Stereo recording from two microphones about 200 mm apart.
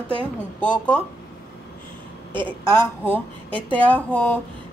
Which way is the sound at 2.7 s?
10° left (ahead or behind).